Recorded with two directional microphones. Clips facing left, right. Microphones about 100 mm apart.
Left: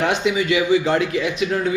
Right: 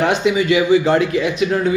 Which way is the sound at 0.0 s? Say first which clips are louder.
Right 3 dB; 40° right (ahead or behind).